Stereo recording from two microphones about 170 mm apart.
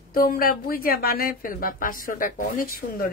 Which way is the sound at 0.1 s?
60° left (ahead or behind).